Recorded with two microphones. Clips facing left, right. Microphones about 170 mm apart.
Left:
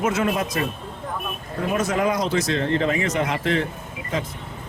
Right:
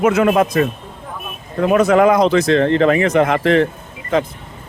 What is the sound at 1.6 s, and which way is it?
Speech, 75° right (ahead or behind).